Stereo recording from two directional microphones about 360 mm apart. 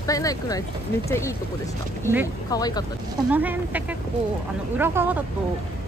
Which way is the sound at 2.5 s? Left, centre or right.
Centre.